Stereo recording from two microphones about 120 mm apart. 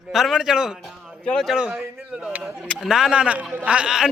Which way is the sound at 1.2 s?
5° left (ahead or behind).